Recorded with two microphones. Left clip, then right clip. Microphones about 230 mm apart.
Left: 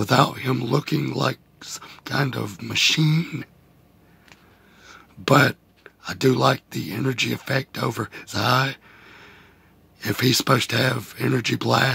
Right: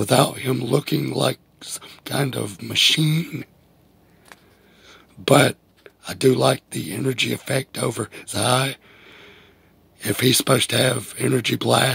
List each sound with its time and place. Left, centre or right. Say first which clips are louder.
0.0 s speech: right 1 dB; centre
4.8 s speech: right 3 dB; centre